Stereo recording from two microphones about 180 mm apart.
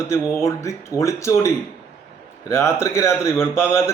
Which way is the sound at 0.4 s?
15° left (ahead or behind).